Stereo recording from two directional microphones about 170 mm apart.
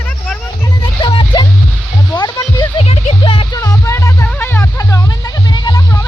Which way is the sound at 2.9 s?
35° left (ahead or behind).